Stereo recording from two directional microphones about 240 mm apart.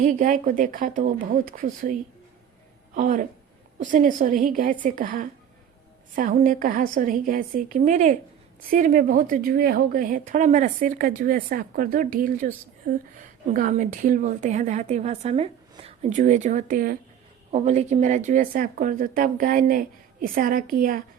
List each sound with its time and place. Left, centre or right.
0.0 s a woman's voice: right